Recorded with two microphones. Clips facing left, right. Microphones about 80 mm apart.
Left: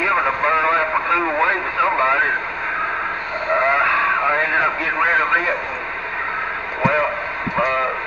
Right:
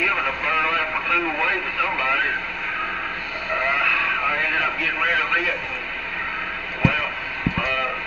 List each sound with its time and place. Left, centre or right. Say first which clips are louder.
0.0 s radio: left 6 dB; left
3.6 s vehicle: left 5 dB; left
4.2 s radio: left 5 dB; left
6.8 s a sound: left 5 dB; left